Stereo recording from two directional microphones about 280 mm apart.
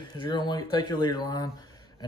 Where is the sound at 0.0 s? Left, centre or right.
Centre.